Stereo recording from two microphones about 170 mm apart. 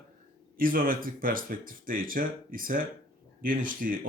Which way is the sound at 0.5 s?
55° right (ahead or behind).